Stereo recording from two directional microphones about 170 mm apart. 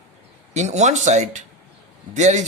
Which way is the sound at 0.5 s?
40° right (ahead or behind).